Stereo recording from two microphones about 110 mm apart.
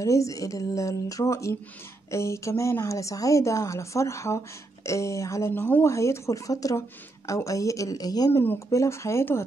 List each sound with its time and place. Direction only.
0.0 s a woman's voice: 30° left (ahead or behind)
8.3 s a woman's voice: 20° left (ahead or behind)